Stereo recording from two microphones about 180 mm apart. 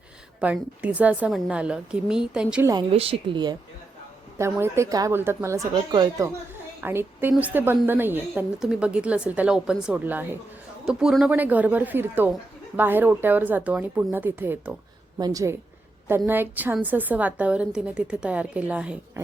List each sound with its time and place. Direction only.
0.3 s a woman's voice: 5° right (ahead or behind)
2.9 s a woman's voice: 30° right (ahead or behind)
4.4 s a woman's voice: 15° right (ahead or behind)